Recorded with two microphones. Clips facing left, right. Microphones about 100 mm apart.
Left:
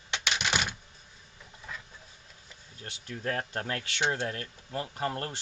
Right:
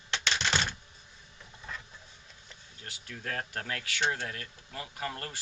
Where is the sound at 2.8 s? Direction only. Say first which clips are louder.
Left 5 dB; 25° left (ahead or behind).